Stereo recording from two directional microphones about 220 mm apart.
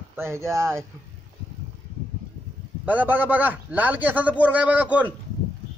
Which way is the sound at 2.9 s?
10° right (ahead or behind).